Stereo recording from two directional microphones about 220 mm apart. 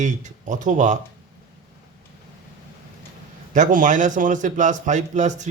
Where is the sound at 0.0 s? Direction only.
35° right (ahead or behind).